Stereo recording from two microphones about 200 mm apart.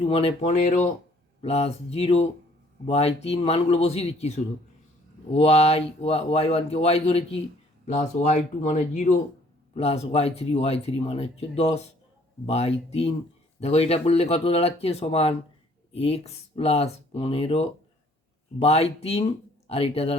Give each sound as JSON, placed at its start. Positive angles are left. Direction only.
{"t": 0.0, "sound": "speech", "side_deg": 30}